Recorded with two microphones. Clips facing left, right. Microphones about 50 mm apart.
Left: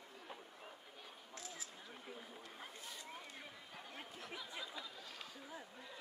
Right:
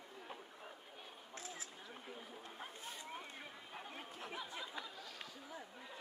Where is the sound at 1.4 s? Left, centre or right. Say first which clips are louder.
Right 2 dB; right.